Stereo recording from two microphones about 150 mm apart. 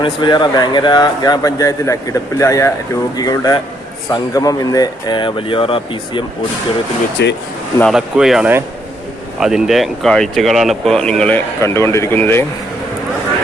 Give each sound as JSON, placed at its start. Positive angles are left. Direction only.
{"t": 0.0, "sound": "speech", "side_deg": 30}
{"t": 7.2, "sound": "speech", "side_deg": 90}
{"t": 7.9, "sound": "speech", "side_deg": -5}